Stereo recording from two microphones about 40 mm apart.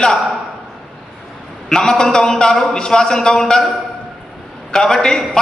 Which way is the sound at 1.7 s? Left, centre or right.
Centre.